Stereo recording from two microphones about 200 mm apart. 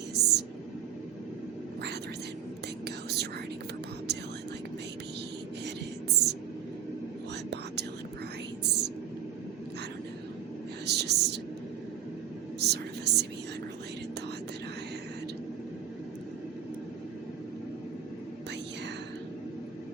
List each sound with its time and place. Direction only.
0.1 s whispering: 55° right (ahead or behind)
2.8 s whispering: 55° right (ahead or behind)
5.6 s a sound: 55° right (ahead or behind)
8.6 s whispering: 55° right (ahead or behind)
10.8 s whispering: 55° right (ahead or behind)
12.5 s a sound: 55° right (ahead or behind)